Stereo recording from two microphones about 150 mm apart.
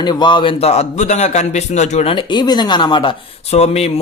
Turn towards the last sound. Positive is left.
turn(degrees=45)  # may be behind; listen again after turning